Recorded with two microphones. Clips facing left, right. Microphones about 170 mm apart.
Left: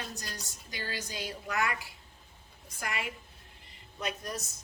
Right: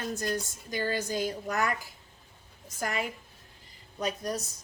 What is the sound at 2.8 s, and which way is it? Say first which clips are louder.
A woman's voice: right 5 dB; 40° right (ahead or behind).